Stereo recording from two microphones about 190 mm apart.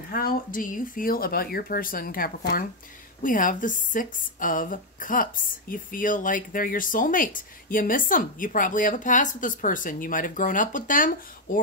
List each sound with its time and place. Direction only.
0.1 s speech: 50° left (ahead or behind)